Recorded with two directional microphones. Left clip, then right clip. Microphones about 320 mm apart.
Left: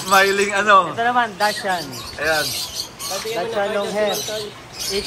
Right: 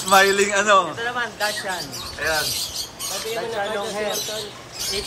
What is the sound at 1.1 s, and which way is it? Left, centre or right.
Speech, centre.